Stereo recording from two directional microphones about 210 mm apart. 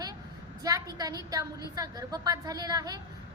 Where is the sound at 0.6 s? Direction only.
15° right (ahead or behind).